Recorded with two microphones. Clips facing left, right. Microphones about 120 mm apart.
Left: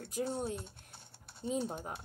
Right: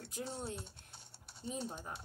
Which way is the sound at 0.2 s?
55° left (ahead or behind).